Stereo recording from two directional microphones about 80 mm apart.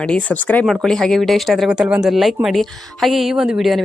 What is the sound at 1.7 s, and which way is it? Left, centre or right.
A woman's voice, centre.